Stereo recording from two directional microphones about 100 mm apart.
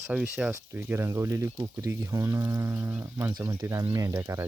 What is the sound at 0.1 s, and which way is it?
Speech, 10° right (ahead or behind).